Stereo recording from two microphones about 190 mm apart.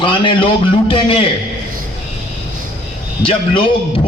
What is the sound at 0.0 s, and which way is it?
A man's voice, 25° left (ahead or behind).